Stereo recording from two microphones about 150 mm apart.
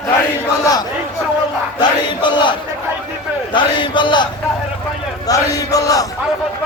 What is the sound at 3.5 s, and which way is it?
Speech, 30° left (ahead or behind).